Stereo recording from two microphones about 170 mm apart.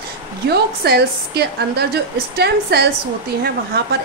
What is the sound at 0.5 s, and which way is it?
A woman's voice, 70° right (ahead or behind).